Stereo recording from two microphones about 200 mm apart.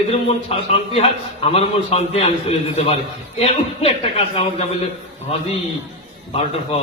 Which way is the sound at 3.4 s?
30° left (ahead or behind).